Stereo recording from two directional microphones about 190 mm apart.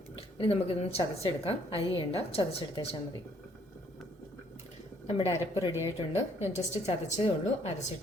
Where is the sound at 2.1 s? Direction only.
30° left (ahead or behind).